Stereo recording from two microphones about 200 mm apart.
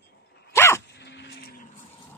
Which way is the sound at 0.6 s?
10° left (ahead or behind).